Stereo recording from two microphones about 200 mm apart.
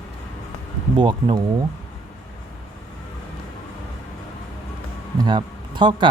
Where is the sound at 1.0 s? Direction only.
25° right (ahead or behind).